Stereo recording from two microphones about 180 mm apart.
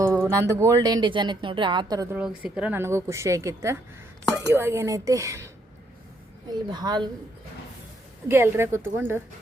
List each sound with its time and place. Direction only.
0.0 s speech: 15° right (ahead or behind)
2.1 s a woman's voice: 5° right (ahead or behind)
6.7 s speech: 25° right (ahead or behind)
8.3 s a woman's voice: 15° right (ahead or behind)